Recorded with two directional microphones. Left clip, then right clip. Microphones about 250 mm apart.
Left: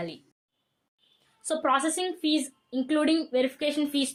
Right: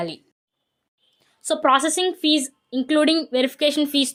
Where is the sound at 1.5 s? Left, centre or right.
Right.